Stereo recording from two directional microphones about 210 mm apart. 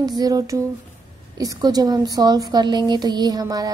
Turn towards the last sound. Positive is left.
turn(degrees=-20)  # may be behind; listen again after turning